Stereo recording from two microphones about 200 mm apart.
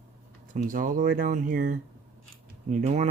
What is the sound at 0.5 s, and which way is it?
Speech, 40° right (ahead or behind).